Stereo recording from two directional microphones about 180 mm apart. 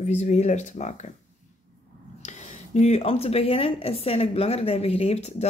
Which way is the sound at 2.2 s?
40° left (ahead or behind).